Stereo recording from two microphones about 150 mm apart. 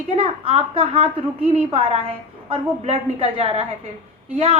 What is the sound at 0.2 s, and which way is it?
Speech, 40° right (ahead or behind).